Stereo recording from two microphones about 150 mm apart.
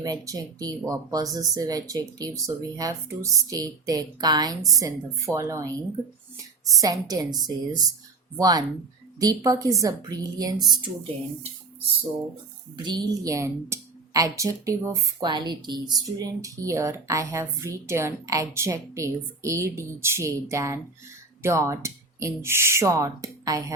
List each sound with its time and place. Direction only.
0.0 s speech: 25° right (ahead or behind)
12.7 s speech: 30° right (ahead or behind)